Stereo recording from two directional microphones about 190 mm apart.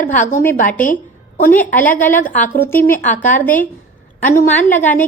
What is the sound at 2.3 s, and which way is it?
Speech, 45° left (ahead or behind).